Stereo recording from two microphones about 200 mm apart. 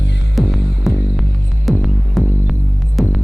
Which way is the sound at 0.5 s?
55° left (ahead or behind).